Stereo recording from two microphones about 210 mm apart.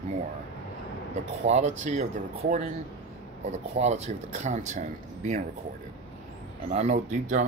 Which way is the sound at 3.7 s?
30° right (ahead or behind).